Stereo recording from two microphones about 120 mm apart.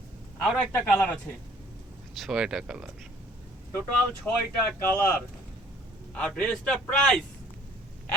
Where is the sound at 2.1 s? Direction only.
5° right (ahead or behind).